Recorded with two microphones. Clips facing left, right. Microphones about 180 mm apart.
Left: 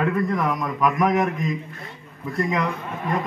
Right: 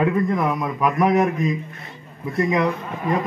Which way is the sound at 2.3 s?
25° right (ahead or behind).